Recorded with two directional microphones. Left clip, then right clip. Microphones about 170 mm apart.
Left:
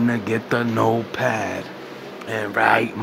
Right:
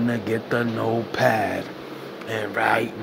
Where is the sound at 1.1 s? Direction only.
Centre (ahead or behind).